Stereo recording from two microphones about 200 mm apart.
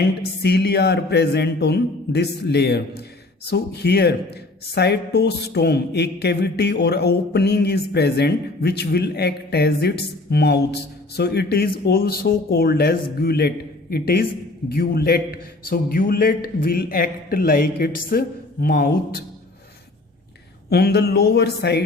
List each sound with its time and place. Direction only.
0.0 s a man's voice: 55° left (ahead or behind)
20.7 s speech: 50° left (ahead or behind)